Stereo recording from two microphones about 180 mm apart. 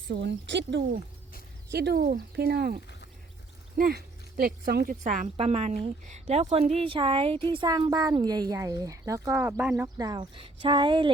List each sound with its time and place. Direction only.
0.1 s speech: 75° right (ahead or behind)
1.7 s speech: 65° right (ahead or behind)
5.0 s a woman's voice: 45° right (ahead or behind); by 11.1 s 25° right (ahead or behind)